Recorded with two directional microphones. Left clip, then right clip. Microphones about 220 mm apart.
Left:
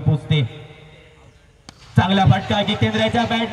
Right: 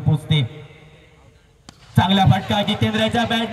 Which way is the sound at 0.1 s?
50° right (ahead or behind).